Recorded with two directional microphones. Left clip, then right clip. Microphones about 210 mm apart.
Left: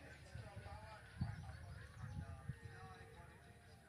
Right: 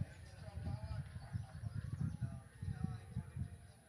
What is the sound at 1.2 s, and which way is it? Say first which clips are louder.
Goose: left 4 dB; 55° right (ahead or behind).